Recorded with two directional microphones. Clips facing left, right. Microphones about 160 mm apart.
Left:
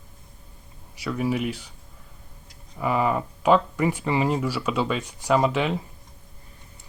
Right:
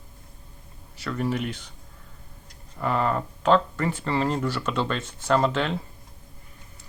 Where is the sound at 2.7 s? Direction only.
10° left (ahead or behind).